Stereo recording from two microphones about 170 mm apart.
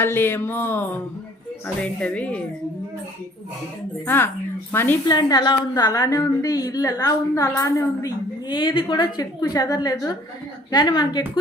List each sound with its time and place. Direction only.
0.0 s music: 15° left (ahead or behind)
4.0 s music: 15° left (ahead or behind)
5.0 s a woman's voice: 25° left (ahead or behind)